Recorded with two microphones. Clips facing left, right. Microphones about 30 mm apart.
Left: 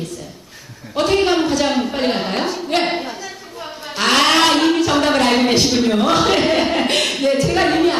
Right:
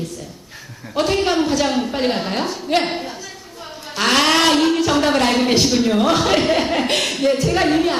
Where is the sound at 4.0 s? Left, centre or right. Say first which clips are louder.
Left 1 dB; centre.